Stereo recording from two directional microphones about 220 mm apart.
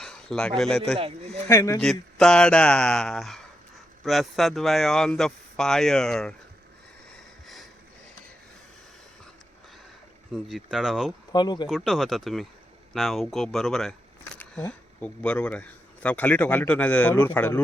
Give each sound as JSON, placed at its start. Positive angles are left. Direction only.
{"t": 0.0, "sound": "a man's voice", "side_deg": 5}
{"t": 0.9, "sound": "speech", "side_deg": -25}
{"t": 1.5, "sound": "speech", "side_deg": 15}
{"t": 1.8, "sound": "speech", "side_deg": 5}
{"t": 7.4, "sound": "a sound", "side_deg": 0}
{"t": 10.3, "sound": "speech", "side_deg": 0}
{"t": 11.3, "sound": "speech", "side_deg": 20}
{"t": 11.7, "sound": "speech", "side_deg": 0}